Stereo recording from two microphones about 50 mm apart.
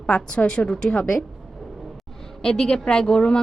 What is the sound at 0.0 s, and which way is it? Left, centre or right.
A woman's voice, left.